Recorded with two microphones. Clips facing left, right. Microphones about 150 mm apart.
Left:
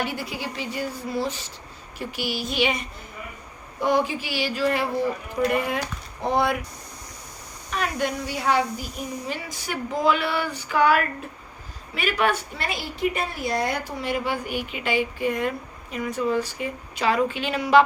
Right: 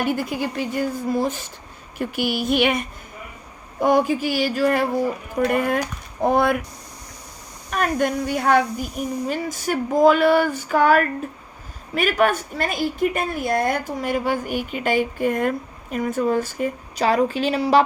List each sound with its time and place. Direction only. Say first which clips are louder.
0.0 s a woman's voice: right 6 dB; 50° right (ahead or behind)
7.7 s a woman's voice: right 5 dB; 50° right (ahead or behind)